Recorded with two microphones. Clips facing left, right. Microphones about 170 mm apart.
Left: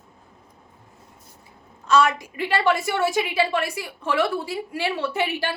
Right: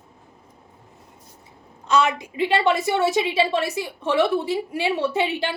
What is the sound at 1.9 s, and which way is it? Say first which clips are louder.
A woman's voice: left 1 dB; 20° right (ahead or behind).